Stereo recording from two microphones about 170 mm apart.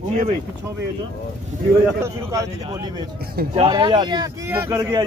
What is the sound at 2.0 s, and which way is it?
A man's voice, 20° right (ahead or behind).